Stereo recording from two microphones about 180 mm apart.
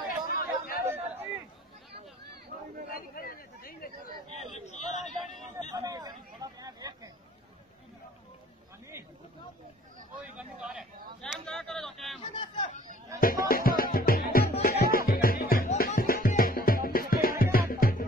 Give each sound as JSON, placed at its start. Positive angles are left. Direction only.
{"t": 0.3, "sound": "chatter", "side_deg": 55}
{"t": 2.9, "sound": "chatter", "side_deg": 55}
{"t": 4.4, "sound": "a sound", "side_deg": 40}
{"t": 5.0, "sound": "a sound", "side_deg": 0}
{"t": 5.7, "sound": "chatter", "side_deg": -20}
{"t": 10.2, "sound": "a sound", "side_deg": -5}
{"t": 11.1, "sound": "chatter", "side_deg": 5}
{"t": 12.2, "sound": "chatter", "side_deg": 30}
{"t": 13.2, "sound": "music", "side_deg": 55}